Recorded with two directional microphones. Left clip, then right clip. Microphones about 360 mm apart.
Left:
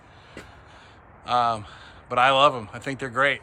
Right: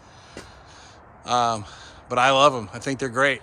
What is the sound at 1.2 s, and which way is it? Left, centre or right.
Speech, centre.